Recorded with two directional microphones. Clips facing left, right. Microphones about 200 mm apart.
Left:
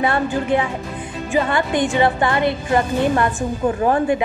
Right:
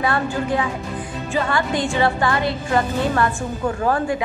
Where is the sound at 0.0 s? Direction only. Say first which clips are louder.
Left 2 dB; 25° left (ahead or behind).